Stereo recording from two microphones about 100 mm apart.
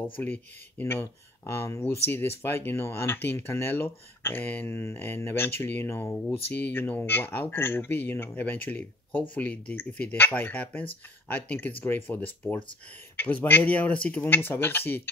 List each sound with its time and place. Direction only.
0.2 s speech: 20° left (ahead or behind)